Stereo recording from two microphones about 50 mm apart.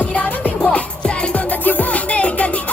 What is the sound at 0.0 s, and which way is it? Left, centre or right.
Music, left.